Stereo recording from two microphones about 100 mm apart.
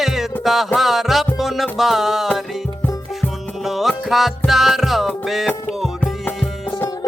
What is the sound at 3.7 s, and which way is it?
Music, centre (ahead or behind).